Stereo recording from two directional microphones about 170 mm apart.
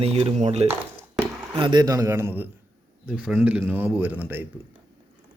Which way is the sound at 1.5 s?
25° right (ahead or behind).